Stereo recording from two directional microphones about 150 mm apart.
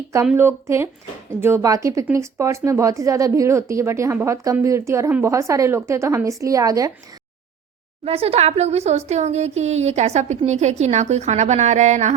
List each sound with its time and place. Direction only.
0.3 s a woman's voice: 15° right (ahead or behind)
8.0 s speech: 40° right (ahead or behind)